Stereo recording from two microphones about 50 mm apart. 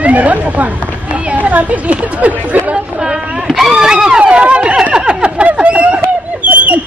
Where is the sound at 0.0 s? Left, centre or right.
Right.